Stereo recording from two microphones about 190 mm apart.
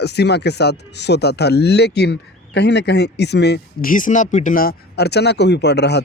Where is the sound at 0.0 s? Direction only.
60° left (ahead or behind).